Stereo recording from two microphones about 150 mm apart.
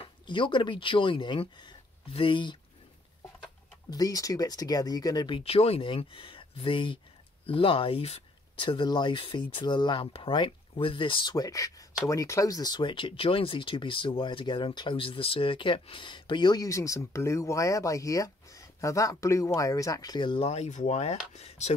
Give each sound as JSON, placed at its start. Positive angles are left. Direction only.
{"t": 0.3, "sound": "speech", "side_deg": 35}
{"t": 3.9, "sound": "speech", "side_deg": 25}